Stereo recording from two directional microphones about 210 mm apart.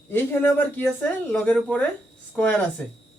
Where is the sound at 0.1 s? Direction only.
10° left (ahead or behind).